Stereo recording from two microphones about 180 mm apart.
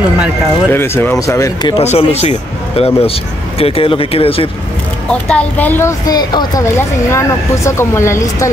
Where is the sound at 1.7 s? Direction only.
30° left (ahead or behind).